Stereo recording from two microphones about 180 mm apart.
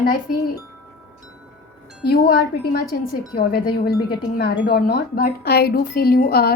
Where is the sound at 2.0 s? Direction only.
60° left (ahead or behind).